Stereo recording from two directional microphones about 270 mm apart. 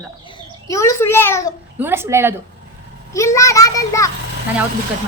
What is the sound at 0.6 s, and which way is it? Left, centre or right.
Speech, centre.